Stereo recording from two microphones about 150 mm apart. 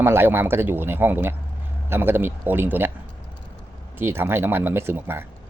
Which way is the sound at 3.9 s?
15° right (ahead or behind).